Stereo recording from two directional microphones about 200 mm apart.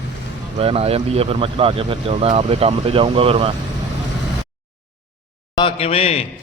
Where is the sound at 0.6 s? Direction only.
30° right (ahead or behind).